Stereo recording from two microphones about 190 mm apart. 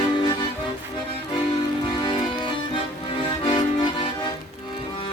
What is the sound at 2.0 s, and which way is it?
Music, 25° left (ahead or behind).